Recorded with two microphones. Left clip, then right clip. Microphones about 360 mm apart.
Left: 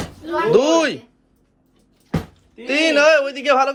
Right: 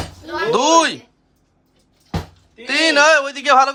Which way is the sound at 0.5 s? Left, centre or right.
Centre.